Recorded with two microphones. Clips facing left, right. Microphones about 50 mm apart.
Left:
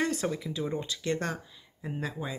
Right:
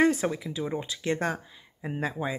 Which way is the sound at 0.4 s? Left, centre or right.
Centre.